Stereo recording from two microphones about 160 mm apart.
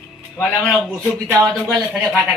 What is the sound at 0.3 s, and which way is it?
Speech, 10° left (ahead or behind).